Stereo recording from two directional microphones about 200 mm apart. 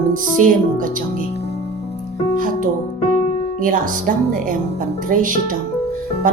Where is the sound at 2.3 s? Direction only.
45° right (ahead or behind).